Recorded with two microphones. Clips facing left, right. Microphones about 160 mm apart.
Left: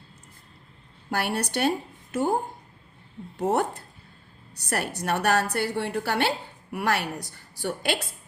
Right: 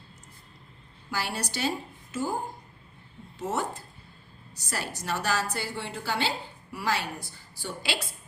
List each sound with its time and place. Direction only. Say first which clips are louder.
1.1 s a woman's voice: left 6 dB; 60° left (ahead or behind)